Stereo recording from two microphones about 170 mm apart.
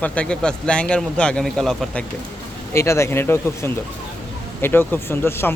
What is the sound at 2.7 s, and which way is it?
Speech, 15° left (ahead or behind).